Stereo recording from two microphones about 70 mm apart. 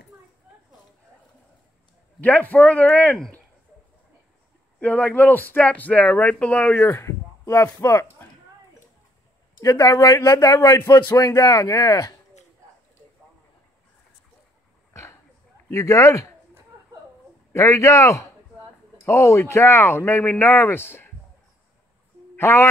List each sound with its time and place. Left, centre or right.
2.1 s speech: left
4.7 s speech: left
6.8 s speech: left
9.6 s speech: left
15.7 s speech: left
17.6 s speech: left
22.4 s speech: left